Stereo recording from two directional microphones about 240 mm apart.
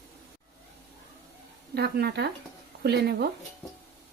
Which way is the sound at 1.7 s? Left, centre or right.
Right.